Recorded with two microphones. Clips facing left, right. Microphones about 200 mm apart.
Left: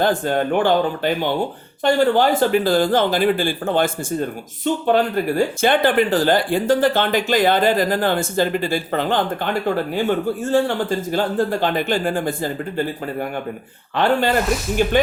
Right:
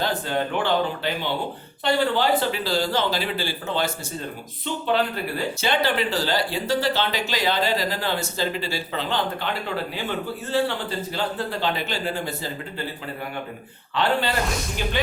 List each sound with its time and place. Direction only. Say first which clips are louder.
0.0 s speech: left 6 dB; 50° left (ahead or behind)
13.9 s speech: left 6 dB; 45° left (ahead or behind)